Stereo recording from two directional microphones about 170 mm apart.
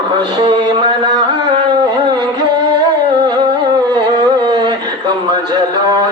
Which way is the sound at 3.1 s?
25° right (ahead or behind).